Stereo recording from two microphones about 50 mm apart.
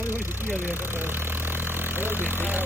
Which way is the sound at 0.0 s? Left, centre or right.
Right.